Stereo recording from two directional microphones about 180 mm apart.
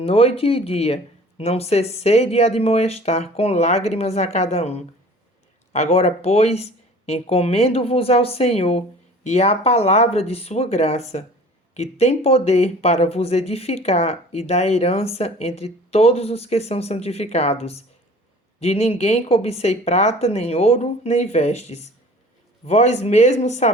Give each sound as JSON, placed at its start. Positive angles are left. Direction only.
{"t": 0.0, "sound": "speech", "side_deg": 35}